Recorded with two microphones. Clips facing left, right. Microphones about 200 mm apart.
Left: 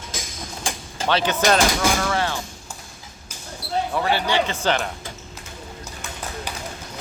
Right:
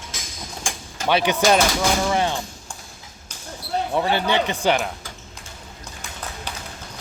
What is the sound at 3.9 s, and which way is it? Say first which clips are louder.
Speech: right 2 dB; 20° right (ahead or behind).